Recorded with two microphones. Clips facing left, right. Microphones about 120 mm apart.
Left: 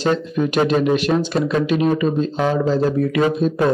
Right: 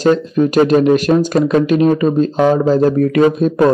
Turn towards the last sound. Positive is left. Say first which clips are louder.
# right 5 dB
turn(degrees=-45)  # may be behind; listen again after turning